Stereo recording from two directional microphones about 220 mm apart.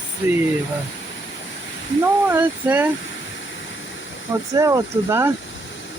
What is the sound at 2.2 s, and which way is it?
Speech, 10° right (ahead or behind).